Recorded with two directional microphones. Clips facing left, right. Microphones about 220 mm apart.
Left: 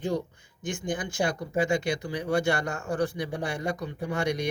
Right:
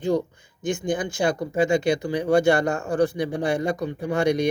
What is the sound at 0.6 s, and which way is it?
Speech, 25° right (ahead or behind).